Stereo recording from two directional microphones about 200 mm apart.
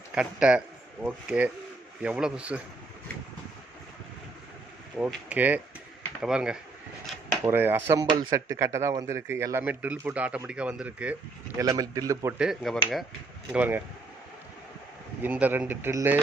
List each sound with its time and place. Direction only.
0.1 s speech: 5° right (ahead or behind)
4.9 s speech: 5° right (ahead or behind)
8.0 s speech: 25° right (ahead or behind)
12.4 s speech: centre (ahead or behind)
15.2 s speech: 10° right (ahead or behind)